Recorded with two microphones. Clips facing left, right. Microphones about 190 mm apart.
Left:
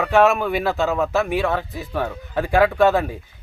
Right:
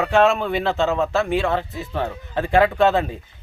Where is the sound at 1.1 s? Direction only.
15° left (ahead or behind).